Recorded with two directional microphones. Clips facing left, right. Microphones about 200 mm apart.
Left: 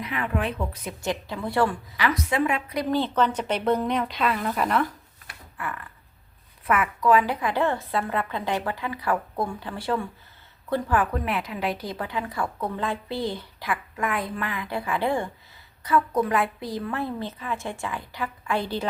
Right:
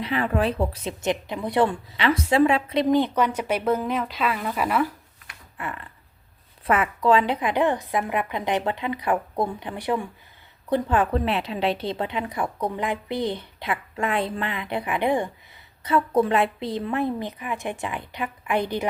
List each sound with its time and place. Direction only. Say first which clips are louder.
0.0 s a woman's voice: right 4 dB; 30° right (ahead or behind); by 4.9 s 5° right (ahead or behind)
5.5 s a sound: right 1 dB; 20° right (ahead or behind)
6.7 s a woman's voice: right 1 dB; 30° right (ahead or behind)